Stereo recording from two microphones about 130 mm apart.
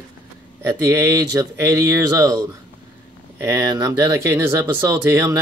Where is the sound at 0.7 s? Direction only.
25° right (ahead or behind).